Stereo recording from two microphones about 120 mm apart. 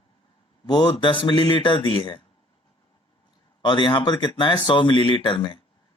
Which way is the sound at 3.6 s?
40° left (ahead or behind).